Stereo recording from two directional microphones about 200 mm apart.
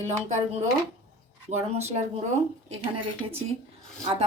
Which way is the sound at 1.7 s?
35° right (ahead or behind).